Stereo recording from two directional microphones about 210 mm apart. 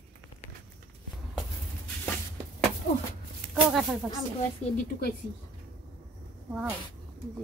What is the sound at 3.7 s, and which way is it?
Speech, centre (ahead or behind).